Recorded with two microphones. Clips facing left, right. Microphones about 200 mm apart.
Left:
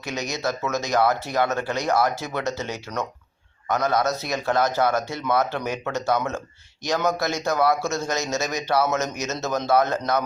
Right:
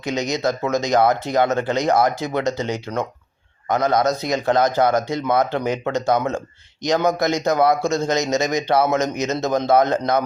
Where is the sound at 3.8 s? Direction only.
15° right (ahead or behind).